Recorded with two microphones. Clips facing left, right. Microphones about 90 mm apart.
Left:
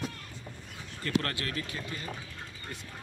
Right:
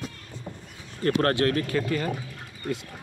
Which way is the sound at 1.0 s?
45° right (ahead or behind).